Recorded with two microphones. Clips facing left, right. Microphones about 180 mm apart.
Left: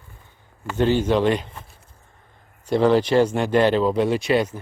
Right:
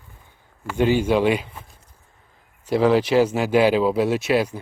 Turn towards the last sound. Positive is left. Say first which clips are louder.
# even
turn(degrees=-5)  # may be behind; listen again after turning